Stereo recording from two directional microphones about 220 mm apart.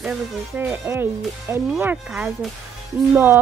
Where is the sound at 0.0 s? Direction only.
5° right (ahead or behind).